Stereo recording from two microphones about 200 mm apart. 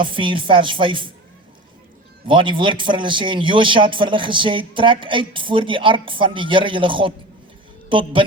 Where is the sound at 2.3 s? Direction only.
25° right (ahead or behind).